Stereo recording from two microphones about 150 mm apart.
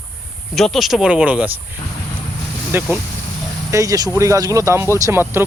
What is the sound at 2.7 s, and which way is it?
Speech, 15° right (ahead or behind).